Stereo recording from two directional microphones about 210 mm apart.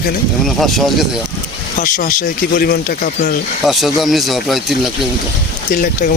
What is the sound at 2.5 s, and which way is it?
Speech, 45° left (ahead or behind).